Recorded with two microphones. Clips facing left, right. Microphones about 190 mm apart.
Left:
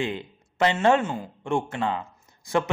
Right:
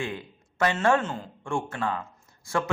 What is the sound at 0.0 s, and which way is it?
A man's voice, 25° left (ahead or behind).